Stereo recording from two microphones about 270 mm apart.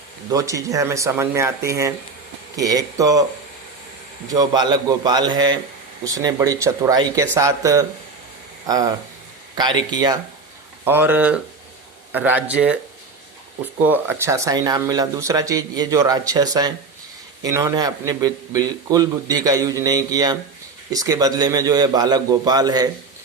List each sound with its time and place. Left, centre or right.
0.3 s a man's voice: centre
4.3 s a man's voice: centre
13.8 s a man's voice: centre